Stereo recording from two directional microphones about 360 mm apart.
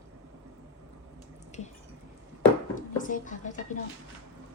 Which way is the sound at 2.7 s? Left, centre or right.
Left.